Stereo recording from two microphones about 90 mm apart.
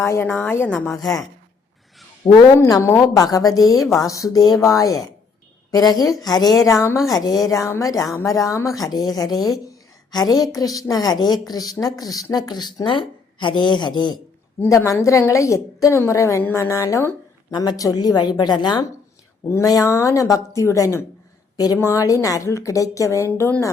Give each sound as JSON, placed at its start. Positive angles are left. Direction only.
{"t": 0.0, "sound": "a woman's voice", "side_deg": 30}
{"t": 2.2, "sound": "a woman's voice", "side_deg": 45}
{"t": 14.7, "sound": "speech", "side_deg": 30}
{"t": 17.7, "sound": "a woman's voice", "side_deg": 45}
{"t": 19.6, "sound": "speech", "side_deg": 40}
{"t": 21.5, "sound": "a sound", "side_deg": 45}
{"t": 21.8, "sound": "speech", "side_deg": 35}